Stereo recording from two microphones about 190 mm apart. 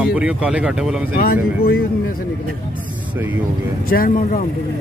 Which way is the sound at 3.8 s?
50° left (ahead or behind).